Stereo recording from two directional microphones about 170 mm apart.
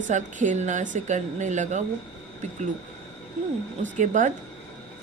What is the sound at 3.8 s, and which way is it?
Speech, 45° right (ahead or behind).